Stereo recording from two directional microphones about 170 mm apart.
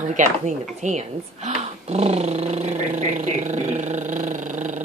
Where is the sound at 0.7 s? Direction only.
40° right (ahead or behind).